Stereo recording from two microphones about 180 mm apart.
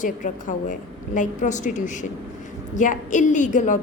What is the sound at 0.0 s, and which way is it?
A woman's voice, 45° left (ahead or behind).